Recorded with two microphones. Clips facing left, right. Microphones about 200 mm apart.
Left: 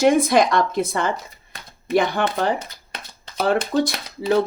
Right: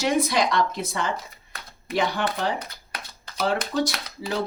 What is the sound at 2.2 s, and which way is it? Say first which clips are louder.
Speech: left 4 dB; 50° left (ahead or behind).